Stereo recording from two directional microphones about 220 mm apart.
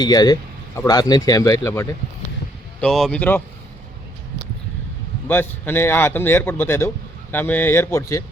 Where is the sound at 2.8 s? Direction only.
Centre (ahead or behind).